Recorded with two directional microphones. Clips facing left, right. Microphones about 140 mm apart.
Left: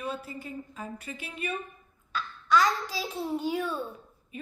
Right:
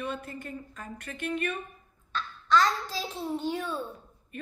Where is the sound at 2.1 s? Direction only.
10° left (ahead or behind).